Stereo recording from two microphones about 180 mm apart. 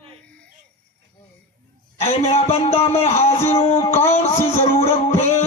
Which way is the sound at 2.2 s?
35° left (ahead or behind).